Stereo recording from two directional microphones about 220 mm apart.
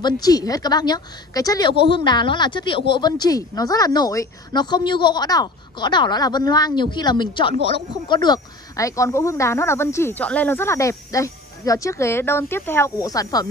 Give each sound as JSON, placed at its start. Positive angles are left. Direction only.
{"t": 0.0, "sound": "speech", "side_deg": 15}